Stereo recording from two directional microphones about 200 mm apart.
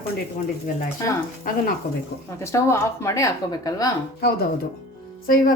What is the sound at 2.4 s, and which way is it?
Speech, 15° left (ahead or behind).